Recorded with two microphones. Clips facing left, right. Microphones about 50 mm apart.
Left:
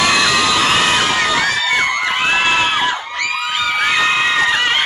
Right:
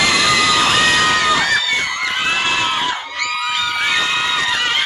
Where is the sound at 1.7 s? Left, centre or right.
Left.